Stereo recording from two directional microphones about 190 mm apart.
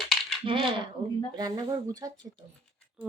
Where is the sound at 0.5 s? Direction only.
25° right (ahead or behind).